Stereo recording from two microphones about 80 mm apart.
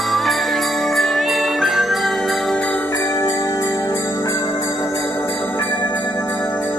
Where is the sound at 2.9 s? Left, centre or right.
Left.